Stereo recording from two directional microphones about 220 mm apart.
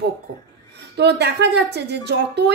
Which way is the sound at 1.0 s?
50° right (ahead or behind).